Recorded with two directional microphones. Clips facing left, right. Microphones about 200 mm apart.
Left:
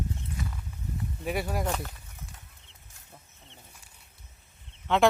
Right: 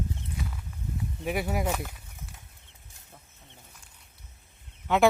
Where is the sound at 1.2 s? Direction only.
5° right (ahead or behind).